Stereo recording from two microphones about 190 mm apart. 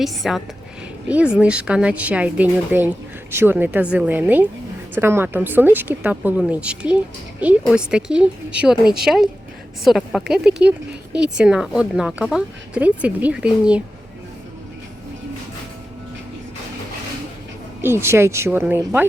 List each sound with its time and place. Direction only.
0.0 s speech: centre (ahead or behind)
17.8 s speech: 15° right (ahead or behind)